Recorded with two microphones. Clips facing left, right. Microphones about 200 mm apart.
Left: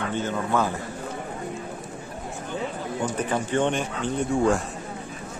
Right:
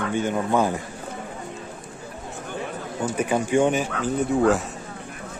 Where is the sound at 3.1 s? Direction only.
10° right (ahead or behind).